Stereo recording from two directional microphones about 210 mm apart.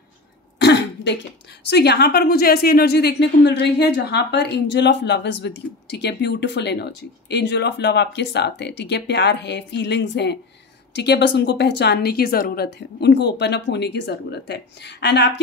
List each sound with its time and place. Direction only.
0.6 s throat clearing: 50° left (ahead or behind)
1.7 s a woman's voice: 50° left (ahead or behind)